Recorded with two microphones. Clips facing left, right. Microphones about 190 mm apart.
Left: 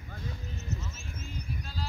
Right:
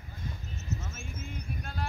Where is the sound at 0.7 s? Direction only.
50° right (ahead or behind).